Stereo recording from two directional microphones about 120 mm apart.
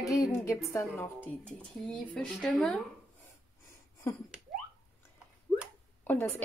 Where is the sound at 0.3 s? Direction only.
25° left (ahead or behind).